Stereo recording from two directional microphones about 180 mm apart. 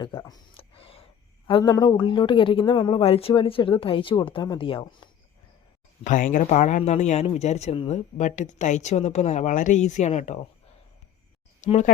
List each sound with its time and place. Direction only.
0.0 s a sound: 20° left (ahead or behind)
1.5 s speech: 25° left (ahead or behind)
6.1 s speech: 45° left (ahead or behind)
11.6 s speech: 40° left (ahead or behind)